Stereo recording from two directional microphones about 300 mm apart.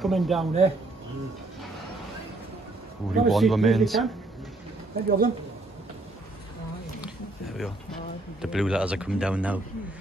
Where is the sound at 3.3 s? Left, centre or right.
Centre.